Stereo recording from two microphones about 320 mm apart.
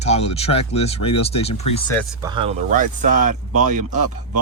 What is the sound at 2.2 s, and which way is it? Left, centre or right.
Speech, centre.